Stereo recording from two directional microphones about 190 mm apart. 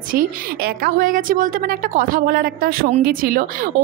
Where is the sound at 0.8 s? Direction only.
45° right (ahead or behind).